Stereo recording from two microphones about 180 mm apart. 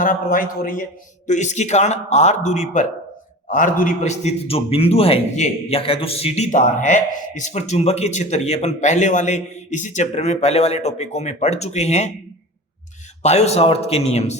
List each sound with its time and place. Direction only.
0.0 s a man's voice: 50° left (ahead or behind)
13.2 s a man's voice: 35° left (ahead or behind)